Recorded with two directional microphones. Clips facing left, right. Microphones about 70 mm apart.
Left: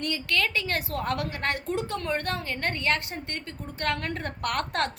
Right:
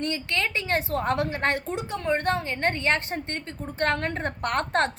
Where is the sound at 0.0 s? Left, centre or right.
Right.